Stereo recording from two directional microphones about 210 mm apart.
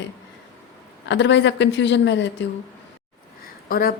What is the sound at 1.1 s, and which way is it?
A woman's voice, 60° left (ahead or behind).